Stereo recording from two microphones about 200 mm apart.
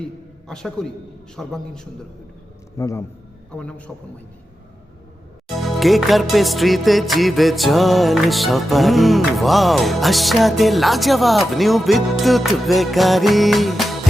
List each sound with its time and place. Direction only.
0.0 s a man's voice: 5° left (ahead or behind)
1.4 s music: 5° left (ahead or behind)
2.7 s a man's voice: 15° left (ahead or behind)
3.5 s music: 5° left (ahead or behind)
5.5 s music: centre (ahead or behind)